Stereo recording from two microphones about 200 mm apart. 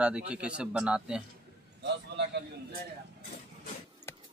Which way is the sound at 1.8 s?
60° right (ahead or behind).